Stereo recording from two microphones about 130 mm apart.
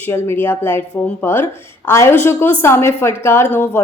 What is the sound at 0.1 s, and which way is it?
A woman's voice, 20° left (ahead or behind).